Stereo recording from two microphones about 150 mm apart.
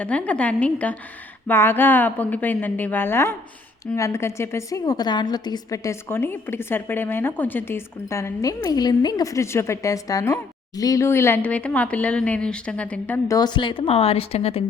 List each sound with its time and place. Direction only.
0.0 s a woman's voice: 10° left (ahead or behind)
13.2 s a woman's voice: 25° left (ahead or behind); by 14.6 s 40° left (ahead or behind)